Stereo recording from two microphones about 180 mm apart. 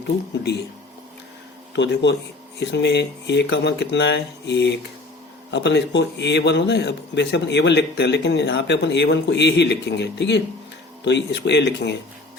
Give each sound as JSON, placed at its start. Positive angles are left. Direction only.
{"t": 1.7, "sound": "a man's voice", "side_deg": 80}